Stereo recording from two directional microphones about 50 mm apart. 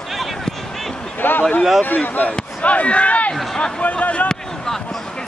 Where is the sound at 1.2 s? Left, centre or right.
Left.